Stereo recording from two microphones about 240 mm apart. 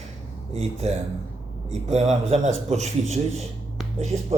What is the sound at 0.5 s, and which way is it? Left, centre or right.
A man's voice, right.